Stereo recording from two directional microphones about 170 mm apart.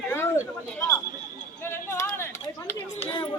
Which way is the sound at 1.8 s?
15° left (ahead or behind).